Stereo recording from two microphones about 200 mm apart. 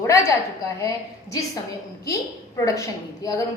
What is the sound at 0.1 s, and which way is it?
A woman's voice, 15° left (ahead or behind).